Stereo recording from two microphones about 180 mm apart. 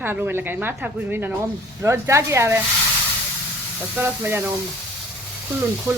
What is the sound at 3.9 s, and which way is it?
Speech, 10° right (ahead or behind).